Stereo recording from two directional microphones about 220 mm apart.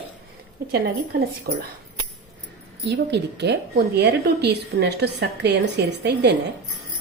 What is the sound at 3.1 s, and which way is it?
A woman's voice, 50° right (ahead or behind).